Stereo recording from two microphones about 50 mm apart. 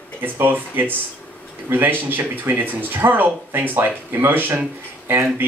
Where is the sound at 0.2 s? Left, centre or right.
Right.